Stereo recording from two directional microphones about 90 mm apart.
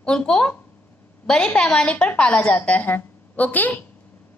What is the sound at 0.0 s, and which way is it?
A woman's voice, 10° left (ahead or behind).